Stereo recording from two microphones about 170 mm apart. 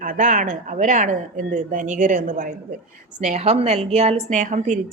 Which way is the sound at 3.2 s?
40° right (ahead or behind).